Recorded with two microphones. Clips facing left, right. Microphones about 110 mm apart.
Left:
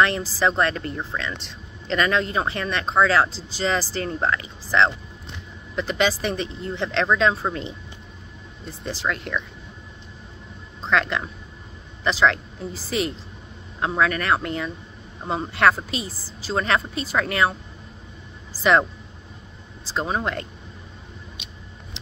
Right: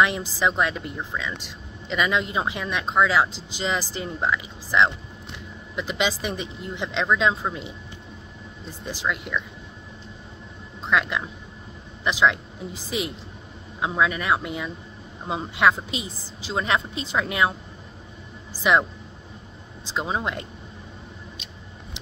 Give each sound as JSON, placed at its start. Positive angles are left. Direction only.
{"t": 0.0, "sound": "speech", "side_deg": -15}
{"t": 8.9, "sound": "speech", "side_deg": -10}
{"t": 10.9, "sound": "speech", "side_deg": -10}
{"t": 19.8, "sound": "speech", "side_deg": -15}